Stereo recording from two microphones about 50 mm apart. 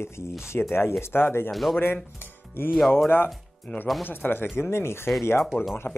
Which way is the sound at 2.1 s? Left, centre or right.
Left.